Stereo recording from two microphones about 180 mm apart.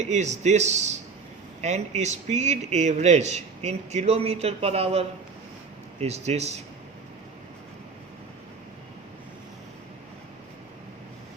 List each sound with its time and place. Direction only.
0.0 s a man's voice: 40° right (ahead or behind)